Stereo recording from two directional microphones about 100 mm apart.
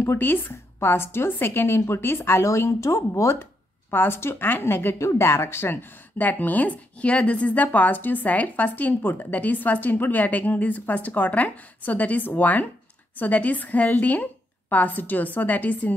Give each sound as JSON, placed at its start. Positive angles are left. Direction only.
{"t": 0.0, "sound": "a woman's voice", "side_deg": 20}